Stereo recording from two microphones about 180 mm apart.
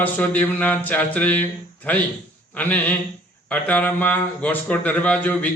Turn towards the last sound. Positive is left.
turn(degrees=10)  # may be behind; listen again after turning